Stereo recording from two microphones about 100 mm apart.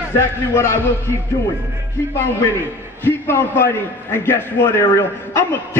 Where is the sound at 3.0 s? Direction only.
25° left (ahead or behind).